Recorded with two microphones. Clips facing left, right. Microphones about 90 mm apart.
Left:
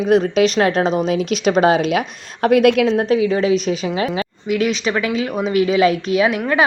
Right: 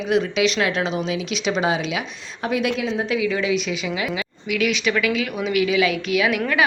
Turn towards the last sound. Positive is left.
turn(degrees=35)  # may be behind; listen again after turning